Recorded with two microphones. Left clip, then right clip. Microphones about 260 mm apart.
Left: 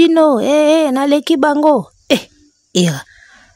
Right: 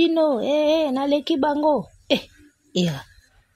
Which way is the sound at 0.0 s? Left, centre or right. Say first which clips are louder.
Left 9 dB; left.